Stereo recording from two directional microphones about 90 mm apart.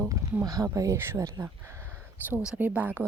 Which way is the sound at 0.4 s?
40° right (ahead or behind).